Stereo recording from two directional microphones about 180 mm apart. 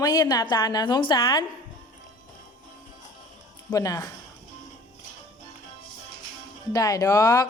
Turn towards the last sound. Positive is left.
turn(degrees=20)  # may be behind; listen again after turning